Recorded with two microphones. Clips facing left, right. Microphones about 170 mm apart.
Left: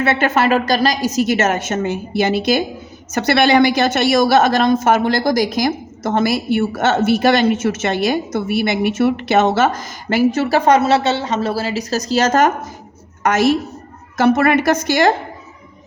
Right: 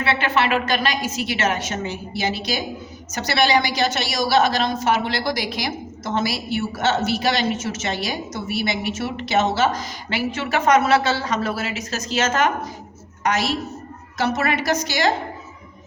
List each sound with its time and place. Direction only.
0.0 s a woman's voice: 45° left (ahead or behind)
13.2 s a woman's voice: 50° left (ahead or behind)